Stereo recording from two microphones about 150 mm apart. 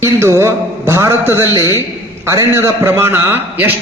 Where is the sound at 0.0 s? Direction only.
15° right (ahead or behind).